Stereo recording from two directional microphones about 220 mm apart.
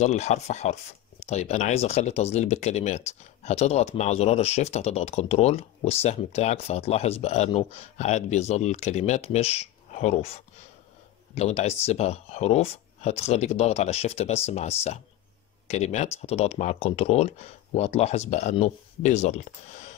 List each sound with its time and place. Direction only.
0.0 s speech: 30° left (ahead or behind)